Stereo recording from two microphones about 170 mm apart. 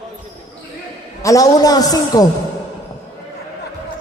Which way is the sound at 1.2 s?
20° left (ahead or behind).